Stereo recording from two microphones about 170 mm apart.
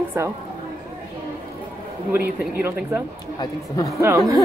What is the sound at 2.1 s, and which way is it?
Speech, 65° right (ahead or behind).